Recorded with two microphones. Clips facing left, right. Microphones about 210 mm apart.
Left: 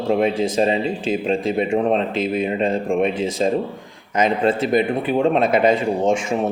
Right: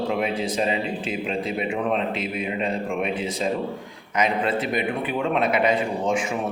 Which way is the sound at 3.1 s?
45° left (ahead or behind).